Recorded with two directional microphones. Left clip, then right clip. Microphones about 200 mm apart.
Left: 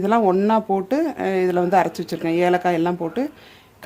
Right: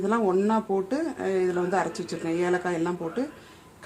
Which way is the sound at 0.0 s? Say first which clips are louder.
Left 6 dB; 45° left (ahead or behind).